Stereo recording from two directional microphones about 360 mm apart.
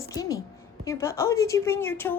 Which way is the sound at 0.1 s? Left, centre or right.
Centre.